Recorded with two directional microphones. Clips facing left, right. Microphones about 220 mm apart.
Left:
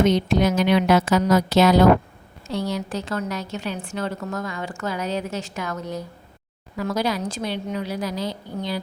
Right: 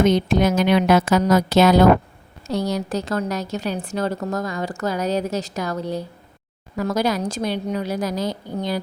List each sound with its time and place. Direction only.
0.0 s a woman's voice: 50° right (ahead or behind); by 6.1 s 30° right (ahead or behind)
6.7 s a woman's voice: 45° right (ahead or behind)